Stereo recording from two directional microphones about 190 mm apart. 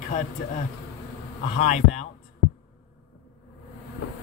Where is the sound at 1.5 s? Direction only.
35° left (ahead or behind).